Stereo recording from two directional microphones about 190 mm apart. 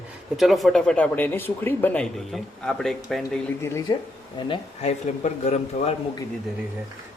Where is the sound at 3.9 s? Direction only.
25° left (ahead or behind).